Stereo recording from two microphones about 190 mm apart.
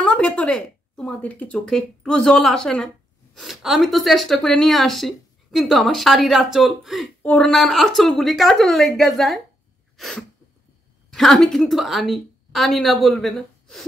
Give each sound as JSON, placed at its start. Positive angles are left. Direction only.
{"t": 0.0, "sound": "speech", "side_deg": 5}
{"t": 9.9, "sound": "sneeze", "side_deg": 0}
{"t": 11.1, "sound": "speech", "side_deg": 0}